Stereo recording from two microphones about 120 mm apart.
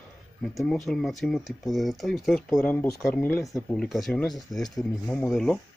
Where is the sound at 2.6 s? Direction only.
15° left (ahead or behind).